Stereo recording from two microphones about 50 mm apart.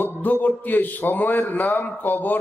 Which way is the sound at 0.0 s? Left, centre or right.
Left.